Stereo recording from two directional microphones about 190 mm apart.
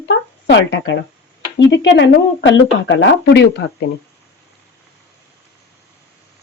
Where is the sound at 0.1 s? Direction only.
70° left (ahead or behind).